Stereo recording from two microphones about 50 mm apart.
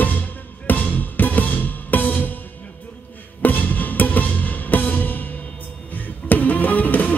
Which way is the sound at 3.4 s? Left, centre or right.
Left.